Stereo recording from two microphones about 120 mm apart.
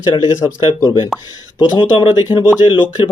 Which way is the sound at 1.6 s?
40° left (ahead or behind).